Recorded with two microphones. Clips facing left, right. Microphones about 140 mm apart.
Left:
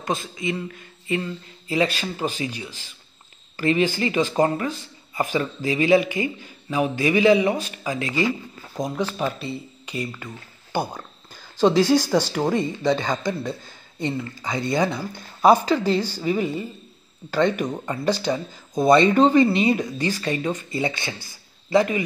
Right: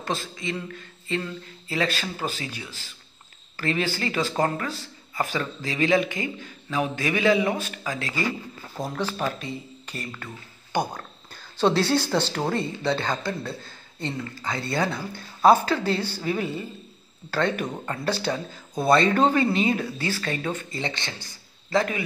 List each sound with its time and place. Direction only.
0.0 s a man's voice: 10° left (ahead or behind)